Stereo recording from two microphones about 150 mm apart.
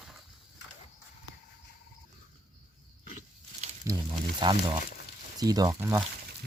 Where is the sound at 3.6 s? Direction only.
50° right (ahead or behind).